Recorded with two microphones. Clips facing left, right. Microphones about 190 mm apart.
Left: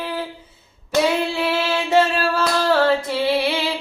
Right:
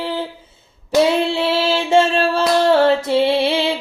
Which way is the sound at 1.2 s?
30° right (ahead or behind).